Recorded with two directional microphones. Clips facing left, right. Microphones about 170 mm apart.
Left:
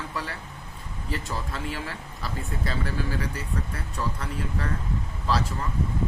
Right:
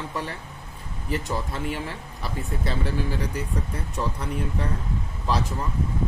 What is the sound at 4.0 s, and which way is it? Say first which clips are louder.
Speech: right 3 dB; 15° right (ahead or behind).